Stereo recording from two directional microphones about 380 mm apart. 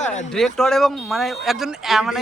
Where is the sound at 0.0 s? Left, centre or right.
Centre.